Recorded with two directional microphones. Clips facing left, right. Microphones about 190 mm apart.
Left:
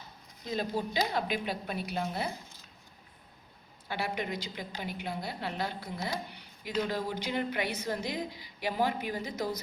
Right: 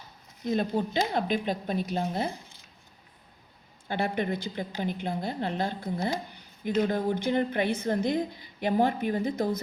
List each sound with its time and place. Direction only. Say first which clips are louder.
0.4 s a woman's voice: right 6 dB; 50° right (ahead or behind)
3.8 s a woman's voice: right 6 dB; 50° right (ahead or behind)